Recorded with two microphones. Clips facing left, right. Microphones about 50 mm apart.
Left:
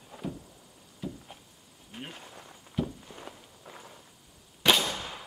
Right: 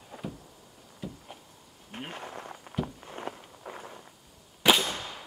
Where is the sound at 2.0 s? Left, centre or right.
Right.